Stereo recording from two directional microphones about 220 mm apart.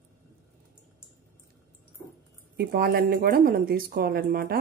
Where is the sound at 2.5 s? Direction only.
45° right (ahead or behind).